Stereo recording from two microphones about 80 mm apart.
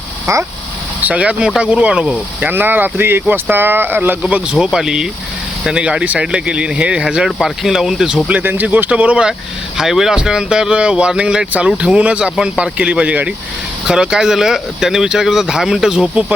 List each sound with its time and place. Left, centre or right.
0.3 s speech: right
1.0 s speech: centre
2.5 s speech: right
4.5 s speech: centre
8.4 s speech: right